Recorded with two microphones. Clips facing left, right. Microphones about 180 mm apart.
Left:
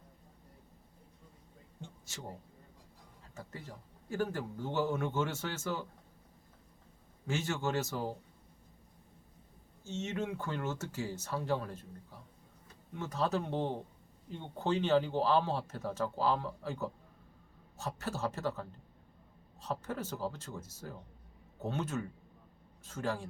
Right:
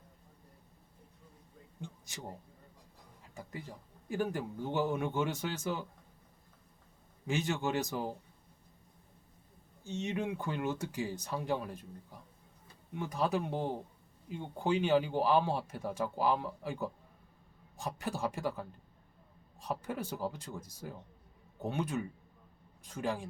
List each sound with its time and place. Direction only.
1.8 s a sound: 15° right (ahead or behind)
3.3 s speech: 15° right (ahead or behind)
7.3 s speech: 15° right (ahead or behind)
9.8 s speech: 15° right (ahead or behind)